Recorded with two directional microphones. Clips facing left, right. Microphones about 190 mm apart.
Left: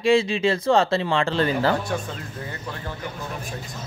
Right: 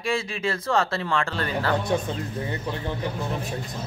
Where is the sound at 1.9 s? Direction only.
20° right (ahead or behind).